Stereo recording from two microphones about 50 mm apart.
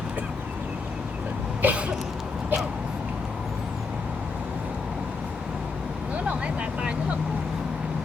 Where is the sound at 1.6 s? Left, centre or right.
Right.